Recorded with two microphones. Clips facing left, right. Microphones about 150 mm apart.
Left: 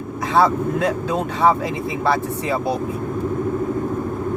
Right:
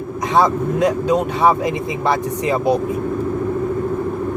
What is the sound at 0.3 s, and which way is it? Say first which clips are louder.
Speech: right 1 dB; 15° right (ahead or behind).